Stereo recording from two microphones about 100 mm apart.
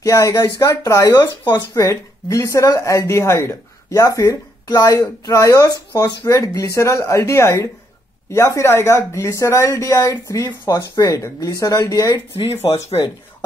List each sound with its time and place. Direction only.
0.0 s speech: 35° left (ahead or behind)
1.8 s speech: 30° left (ahead or behind)